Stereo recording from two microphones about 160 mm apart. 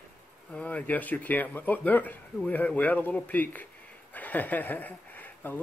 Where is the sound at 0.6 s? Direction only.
10° left (ahead or behind).